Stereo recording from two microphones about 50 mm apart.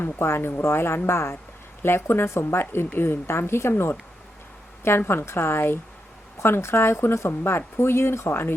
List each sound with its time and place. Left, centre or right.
0.0 s a woman's voice: left
8.3 s a woman's voice: left